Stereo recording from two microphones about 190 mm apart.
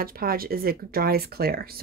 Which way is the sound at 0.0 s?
50° right (ahead or behind).